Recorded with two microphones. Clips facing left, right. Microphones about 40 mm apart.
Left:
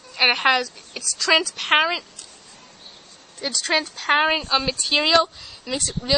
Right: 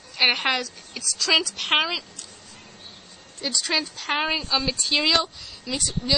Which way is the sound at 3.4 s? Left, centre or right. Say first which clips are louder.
Left 1 dB; left.